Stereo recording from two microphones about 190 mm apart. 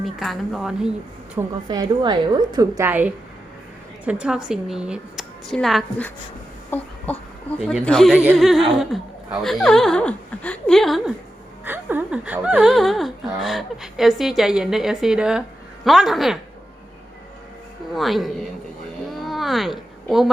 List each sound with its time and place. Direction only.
0.0 s speech: centre (ahead or behind)
1.6 s a woman's voice: 25° right (ahead or behind); by 6.1 s 5° left (ahead or behind)
6.7 s a sound: 10° left (ahead or behind)
7.6 s speech: centre (ahead or behind)
11.6 s speech: 10° right (ahead or behind)
17.9 s speech: centre (ahead or behind)
19.2 s a sound: centre (ahead or behind)